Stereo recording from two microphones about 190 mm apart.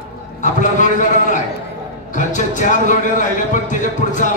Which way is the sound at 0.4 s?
40° left (ahead or behind).